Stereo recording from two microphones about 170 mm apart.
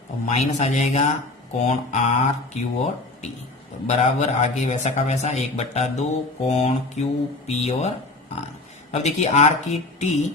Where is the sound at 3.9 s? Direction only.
40° left (ahead or behind).